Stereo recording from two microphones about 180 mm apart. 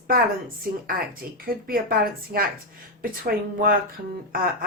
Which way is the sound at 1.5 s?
55° right (ahead or behind).